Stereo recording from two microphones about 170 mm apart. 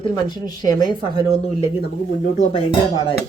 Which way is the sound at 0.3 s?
25° left (ahead or behind).